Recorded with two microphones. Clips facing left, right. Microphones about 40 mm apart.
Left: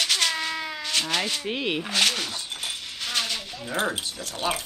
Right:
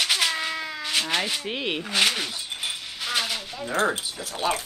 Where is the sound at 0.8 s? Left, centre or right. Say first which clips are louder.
Right 1 dB; centre.